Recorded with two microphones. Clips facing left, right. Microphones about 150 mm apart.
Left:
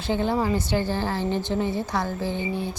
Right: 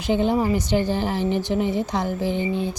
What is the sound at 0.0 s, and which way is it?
A woman's voice, 15° right (ahead or behind).